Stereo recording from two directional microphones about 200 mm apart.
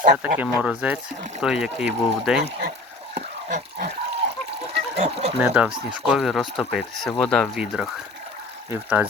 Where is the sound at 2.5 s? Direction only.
50° right (ahead or behind).